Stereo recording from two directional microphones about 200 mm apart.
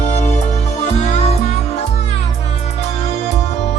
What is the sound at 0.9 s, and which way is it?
Music, 30° left (ahead or behind).